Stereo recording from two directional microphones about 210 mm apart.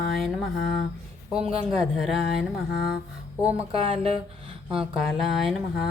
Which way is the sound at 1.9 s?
Centre (ahead or behind).